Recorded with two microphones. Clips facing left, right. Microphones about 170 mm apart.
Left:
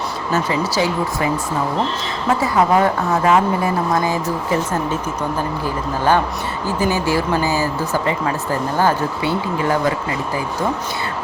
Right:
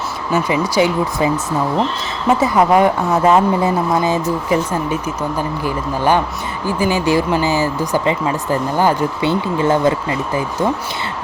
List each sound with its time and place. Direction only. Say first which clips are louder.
0.3 s a woman's voice: right 3 dB; 15° right (ahead or behind)
2.4 s a woman's voice: right 3 dB; 15° right (ahead or behind)
6.7 s speech: right 3 dB; 15° right (ahead or behind)